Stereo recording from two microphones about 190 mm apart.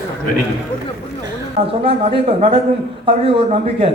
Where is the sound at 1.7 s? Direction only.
30° right (ahead or behind).